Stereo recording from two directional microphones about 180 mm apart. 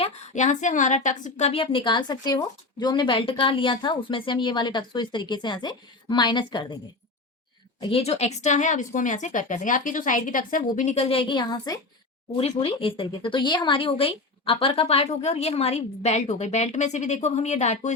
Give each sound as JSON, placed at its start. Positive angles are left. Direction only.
{"t": 0.0, "sound": "a woman's voice", "side_deg": 45}
{"t": 7.8, "sound": "speech", "side_deg": 30}